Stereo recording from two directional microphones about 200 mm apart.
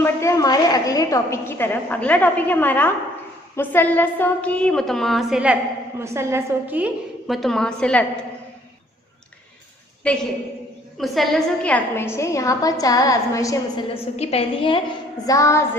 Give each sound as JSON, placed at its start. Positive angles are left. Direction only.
{"t": 0.0, "sound": "a woman's voice", "side_deg": 15}
{"t": 10.0, "sound": "a woman's voice", "side_deg": 5}
{"t": 13.9, "sound": "a woman's voice", "side_deg": 30}
{"t": 15.3, "sound": "a woman's voice", "side_deg": 15}